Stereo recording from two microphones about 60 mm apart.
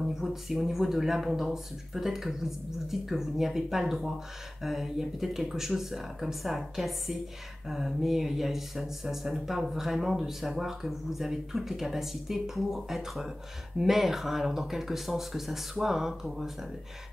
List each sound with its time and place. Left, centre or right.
0.1 s speech: centre